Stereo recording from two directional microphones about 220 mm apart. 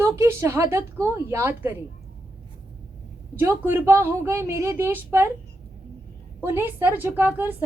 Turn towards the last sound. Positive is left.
turn(degrees=-10)  # may be behind; listen again after turning